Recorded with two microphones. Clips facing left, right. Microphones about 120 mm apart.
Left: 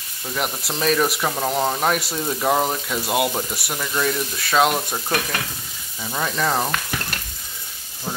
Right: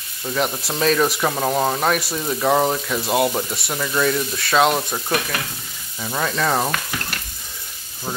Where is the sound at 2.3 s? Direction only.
5° left (ahead or behind).